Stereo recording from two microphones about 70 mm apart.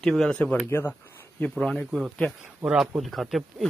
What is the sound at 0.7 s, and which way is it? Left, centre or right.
Speech, left.